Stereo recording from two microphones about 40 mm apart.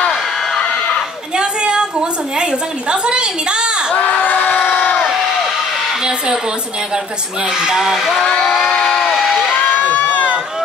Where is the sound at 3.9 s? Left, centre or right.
Left.